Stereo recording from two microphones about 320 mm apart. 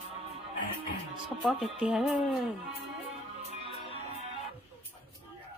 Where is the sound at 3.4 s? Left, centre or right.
Centre.